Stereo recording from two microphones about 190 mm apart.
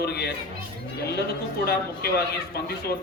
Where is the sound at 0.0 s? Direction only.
60° left (ahead or behind).